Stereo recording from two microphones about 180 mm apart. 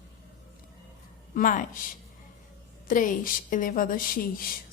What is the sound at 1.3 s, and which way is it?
Speech, 50° left (ahead or behind).